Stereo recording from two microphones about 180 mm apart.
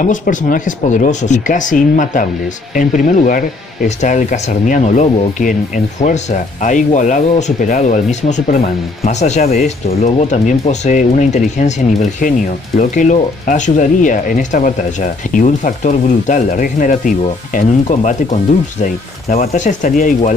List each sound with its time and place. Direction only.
0.0 s speech: 45° left (ahead or behind)